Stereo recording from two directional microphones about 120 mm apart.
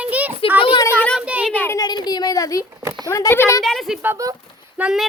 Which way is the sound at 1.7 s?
35° left (ahead or behind).